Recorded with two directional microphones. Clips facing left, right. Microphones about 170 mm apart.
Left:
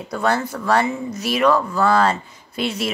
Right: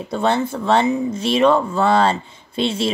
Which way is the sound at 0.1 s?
25° right (ahead or behind).